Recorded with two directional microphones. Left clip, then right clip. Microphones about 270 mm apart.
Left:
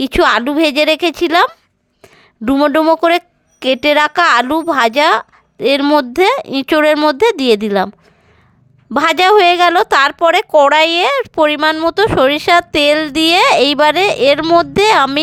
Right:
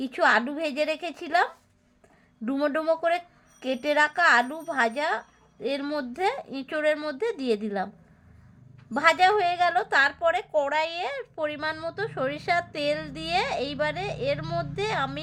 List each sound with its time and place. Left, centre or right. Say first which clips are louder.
0.0 s a woman's voice: left 11 dB; left
8.9 s a woman's voice: left 10 dB; left